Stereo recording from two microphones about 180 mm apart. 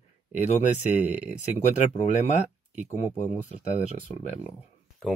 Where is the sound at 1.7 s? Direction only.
40° left (ahead or behind).